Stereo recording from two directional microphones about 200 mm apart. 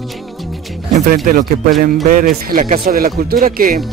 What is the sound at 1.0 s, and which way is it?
Speech, 45° right (ahead or behind).